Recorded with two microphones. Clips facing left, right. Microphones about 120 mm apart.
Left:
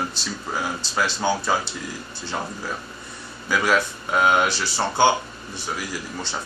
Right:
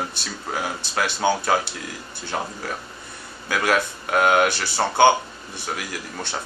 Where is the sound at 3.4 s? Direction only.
60° right (ahead or behind).